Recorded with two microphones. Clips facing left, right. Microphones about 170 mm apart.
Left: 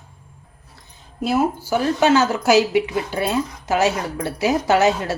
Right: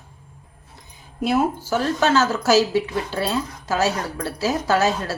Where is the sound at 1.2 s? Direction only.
5° left (ahead or behind).